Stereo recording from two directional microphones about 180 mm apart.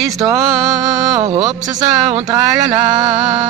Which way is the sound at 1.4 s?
20° right (ahead or behind).